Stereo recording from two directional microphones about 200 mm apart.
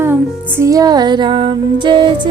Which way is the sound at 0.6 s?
15° right (ahead or behind).